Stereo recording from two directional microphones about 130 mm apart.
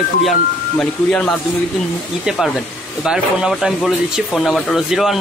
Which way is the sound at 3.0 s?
5° right (ahead or behind).